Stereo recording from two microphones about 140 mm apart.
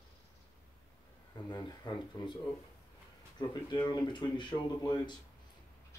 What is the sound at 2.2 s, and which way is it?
Speech, 25° left (ahead or behind).